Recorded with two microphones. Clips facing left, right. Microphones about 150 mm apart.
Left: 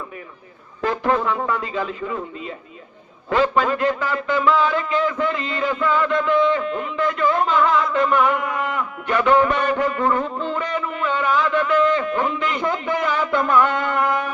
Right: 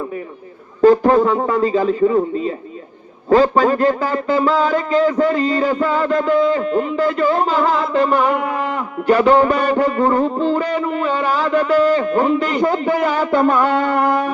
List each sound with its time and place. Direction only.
0.8 s a man's voice: 35° right (ahead or behind)